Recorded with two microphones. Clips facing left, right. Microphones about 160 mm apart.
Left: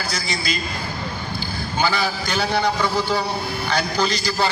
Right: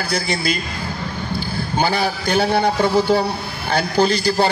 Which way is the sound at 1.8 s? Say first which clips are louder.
Right 2 dB; 55° right (ahead or behind).